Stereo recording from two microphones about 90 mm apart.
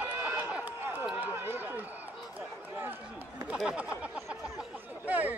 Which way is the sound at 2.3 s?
20° right (ahead or behind).